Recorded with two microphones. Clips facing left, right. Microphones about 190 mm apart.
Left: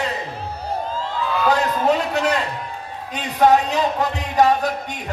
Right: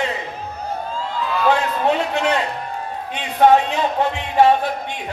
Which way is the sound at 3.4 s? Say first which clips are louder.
Right 1 dB; 40° left (ahead or behind).